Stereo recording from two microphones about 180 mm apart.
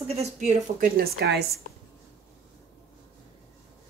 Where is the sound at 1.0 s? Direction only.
65° right (ahead or behind).